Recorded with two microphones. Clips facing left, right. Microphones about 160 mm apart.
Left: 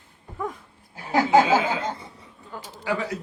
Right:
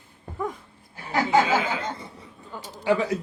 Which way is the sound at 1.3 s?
25° left (ahead or behind).